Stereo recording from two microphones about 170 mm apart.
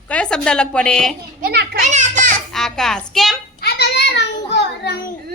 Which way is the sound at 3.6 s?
85° left.